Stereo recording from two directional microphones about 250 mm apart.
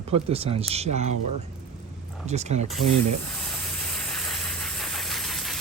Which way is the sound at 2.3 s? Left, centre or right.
Right.